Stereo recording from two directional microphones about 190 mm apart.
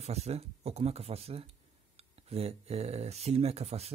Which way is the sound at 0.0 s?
35° right (ahead or behind).